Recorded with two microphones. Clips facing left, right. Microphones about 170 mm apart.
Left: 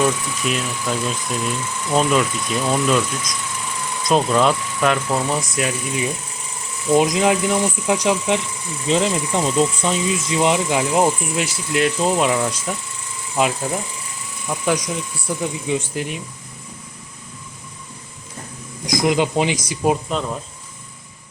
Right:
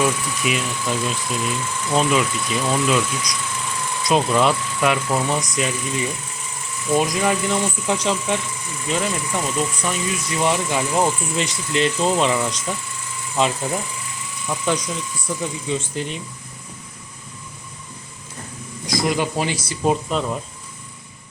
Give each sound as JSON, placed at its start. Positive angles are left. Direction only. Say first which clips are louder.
{"t": 0.0, "sound": "speech", "louder": "left 1 dB", "side_deg": -5}
{"t": 6.8, "sound": "speech", "louder": "left 4 dB", "side_deg": 20}
{"t": 18.9, "sound": "speech", "louder": "left 3 dB", "side_deg": 20}